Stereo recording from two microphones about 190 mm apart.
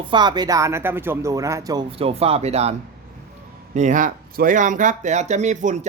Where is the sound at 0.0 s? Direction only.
25° right (ahead or behind).